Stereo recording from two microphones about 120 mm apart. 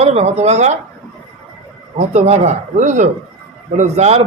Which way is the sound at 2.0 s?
60° right (ahead or behind).